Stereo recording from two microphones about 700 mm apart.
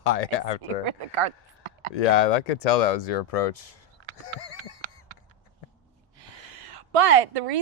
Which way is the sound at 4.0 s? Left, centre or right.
Right.